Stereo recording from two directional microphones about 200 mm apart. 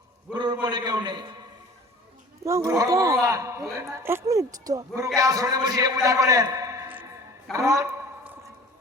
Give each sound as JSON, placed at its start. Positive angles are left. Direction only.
{"t": 0.6, "sound": "a man's voice", "side_deg": -20}
{"t": 2.4, "sound": "a woman's voice", "side_deg": -15}
{"t": 7.5, "sound": "a sound", "side_deg": -15}